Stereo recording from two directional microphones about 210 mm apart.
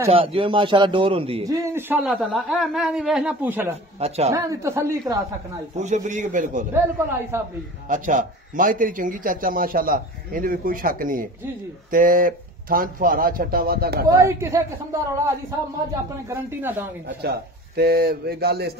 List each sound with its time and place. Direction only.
0.1 s speech: 25° right (ahead or behind)
1.5 s a man's voice: 15° right (ahead or behind)
5.8 s a man's voice: 35° right (ahead or behind)
6.7 s speech: 10° right (ahead or behind)
7.9 s a man's voice: 35° right (ahead or behind)
14.0 s speech: 15° right (ahead or behind)
15.9 s speech: 15° right (ahead or behind)
17.2 s a man's voice: 50° right (ahead or behind)